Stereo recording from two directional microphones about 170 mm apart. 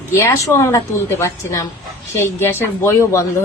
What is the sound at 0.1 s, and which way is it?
A woman's voice, 15° left (ahead or behind).